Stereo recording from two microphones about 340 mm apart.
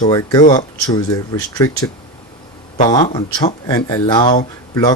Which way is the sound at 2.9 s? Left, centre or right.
Centre.